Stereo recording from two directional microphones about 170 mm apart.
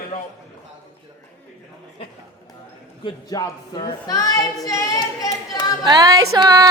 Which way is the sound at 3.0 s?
25° left (ahead or behind).